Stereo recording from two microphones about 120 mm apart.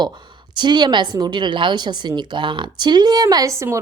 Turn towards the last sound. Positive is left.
turn(degrees=-25)  # may be behind; listen again after turning